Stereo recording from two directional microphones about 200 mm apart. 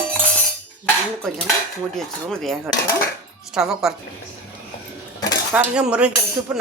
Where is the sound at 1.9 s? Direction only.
Centre (ahead or behind).